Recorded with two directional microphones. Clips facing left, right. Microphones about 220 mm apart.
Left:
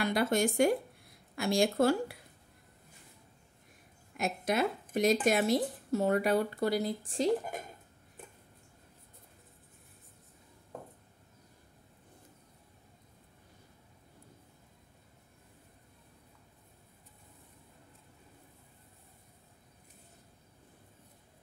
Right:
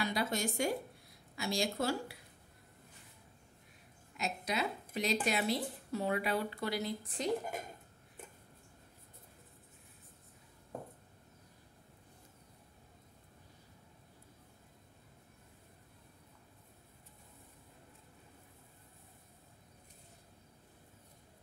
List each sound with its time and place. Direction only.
0.0 s speech: 55° left (ahead or behind)
4.2 s speech: 50° left (ahead or behind); by 7.2 s 35° left (ahead or behind)